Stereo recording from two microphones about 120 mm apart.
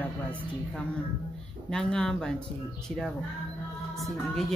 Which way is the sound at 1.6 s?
5° left (ahead or behind).